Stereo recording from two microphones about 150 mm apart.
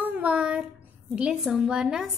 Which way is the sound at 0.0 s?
10° right (ahead or behind).